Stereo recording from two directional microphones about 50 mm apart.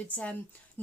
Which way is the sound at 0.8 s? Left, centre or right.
Left.